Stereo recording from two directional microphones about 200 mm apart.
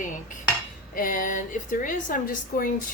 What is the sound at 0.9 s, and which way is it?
A woman's voice, 40° left (ahead or behind).